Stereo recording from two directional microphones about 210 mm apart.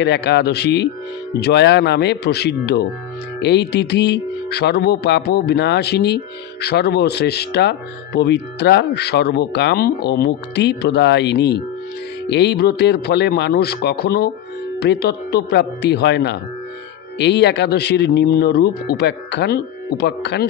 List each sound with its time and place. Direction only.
0.0 s speech: 55° left (ahead or behind)